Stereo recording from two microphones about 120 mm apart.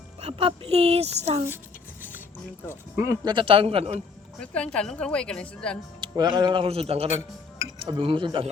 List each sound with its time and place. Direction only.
0.2 s a woman's voice: 60° right (ahead or behind)
2.6 s speech: 20° right (ahead or behind)
3.2 s speech: 45° right (ahead or behind)
4.4 s speech: 10° left (ahead or behind)
6.0 s speech: 40° right (ahead or behind)